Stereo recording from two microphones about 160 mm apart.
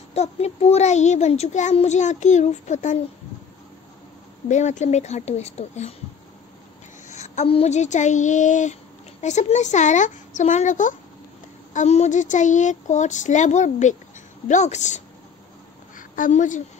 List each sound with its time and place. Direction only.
0.1 s a child's voice: 40° left (ahead or behind)
4.5 s a child's voice: 50° left (ahead or behind)
7.1 s a child's voice: 45° left (ahead or behind)
16.0 s a woman's voice: 55° left (ahead or behind)